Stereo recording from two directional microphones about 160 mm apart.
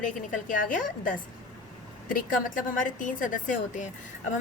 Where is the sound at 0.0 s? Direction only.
55° left (ahead or behind).